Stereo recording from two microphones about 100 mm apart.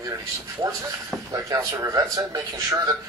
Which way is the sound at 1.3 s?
35° right (ahead or behind).